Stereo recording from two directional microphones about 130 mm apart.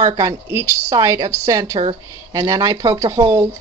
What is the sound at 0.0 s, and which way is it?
Speech, 30° right (ahead or behind).